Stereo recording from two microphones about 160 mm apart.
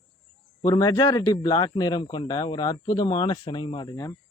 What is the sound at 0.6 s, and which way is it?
Speech, 25° left (ahead or behind).